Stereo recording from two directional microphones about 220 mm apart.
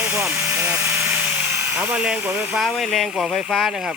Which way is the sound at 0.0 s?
5° right (ahead or behind).